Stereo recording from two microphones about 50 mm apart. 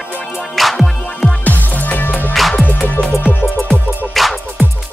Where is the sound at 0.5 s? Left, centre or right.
Centre.